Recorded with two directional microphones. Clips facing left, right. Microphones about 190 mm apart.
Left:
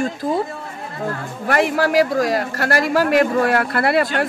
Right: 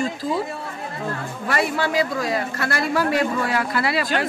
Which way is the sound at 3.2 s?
55° left (ahead or behind).